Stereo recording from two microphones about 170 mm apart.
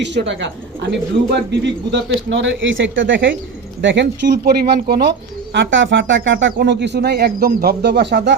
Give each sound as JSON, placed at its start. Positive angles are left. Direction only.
{"t": 0.0, "sound": "speech", "side_deg": -90}
{"t": 5.5, "sound": "speech", "side_deg": -90}